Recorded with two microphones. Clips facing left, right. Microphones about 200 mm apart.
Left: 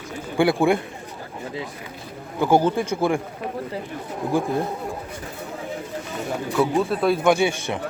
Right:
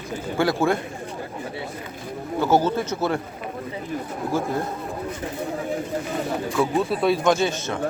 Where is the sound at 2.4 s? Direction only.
15° left (ahead or behind).